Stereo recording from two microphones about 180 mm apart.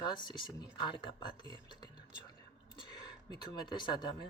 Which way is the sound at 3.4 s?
25° left (ahead or behind).